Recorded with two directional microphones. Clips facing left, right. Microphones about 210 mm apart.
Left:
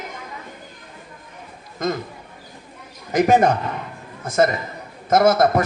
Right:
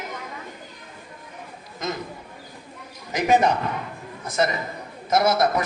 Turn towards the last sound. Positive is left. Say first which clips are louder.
# left 5 dB
turn(degrees=50)  # may be behind; listen again after turning